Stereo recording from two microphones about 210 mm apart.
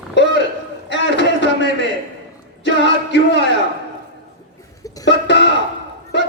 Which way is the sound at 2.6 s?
60° left (ahead or behind).